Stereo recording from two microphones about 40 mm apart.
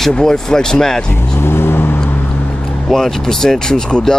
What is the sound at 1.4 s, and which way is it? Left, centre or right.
Vehicle, left.